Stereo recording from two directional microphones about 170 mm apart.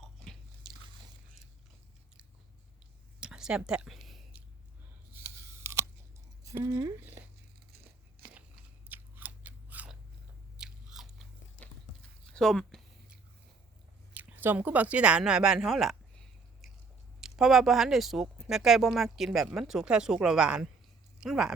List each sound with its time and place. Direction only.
0.0 s biting: centre (ahead or behind)
3.2 s a sound: 5° right (ahead or behind)
5.1 s crunch: 15° right (ahead or behind)
6.4 s speech: 20° right (ahead or behind)
8.2 s biting: 65° right (ahead or behind)
8.9 s scissors: 10° right (ahead or behind)
10.6 s biting: 5° right (ahead or behind)
12.2 s a sound: 5° left (ahead or behind)
14.1 s speech: 10° right (ahead or behind)
17.2 s speech: 5° right (ahead or behind)